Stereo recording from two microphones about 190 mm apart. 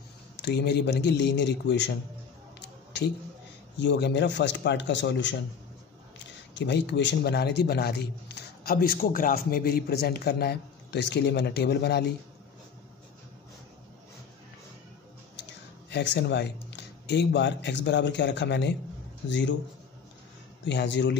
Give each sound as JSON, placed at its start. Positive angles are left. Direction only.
{"t": 0.4, "sound": "a man's voice", "side_deg": 60}
{"t": 3.7, "sound": "speech", "side_deg": 65}
{"t": 6.5, "sound": "a man's voice", "side_deg": 65}
{"t": 15.4, "sound": "speech", "side_deg": 65}
{"t": 20.6, "sound": "speech", "side_deg": 65}